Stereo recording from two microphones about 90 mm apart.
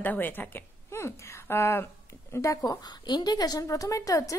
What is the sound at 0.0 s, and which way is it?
A woman's voice, 20° left (ahead or behind).